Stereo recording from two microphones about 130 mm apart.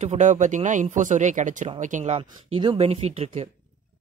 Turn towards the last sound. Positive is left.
turn(degrees=-55)  # may be behind; listen again after turning